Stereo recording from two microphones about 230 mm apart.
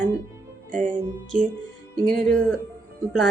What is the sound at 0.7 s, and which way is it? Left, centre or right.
Music, right.